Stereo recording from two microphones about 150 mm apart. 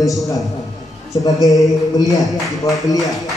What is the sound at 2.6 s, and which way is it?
Speech, 25° left (ahead or behind).